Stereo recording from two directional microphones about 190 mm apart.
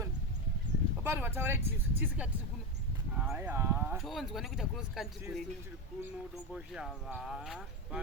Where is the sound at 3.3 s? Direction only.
10° right (ahead or behind).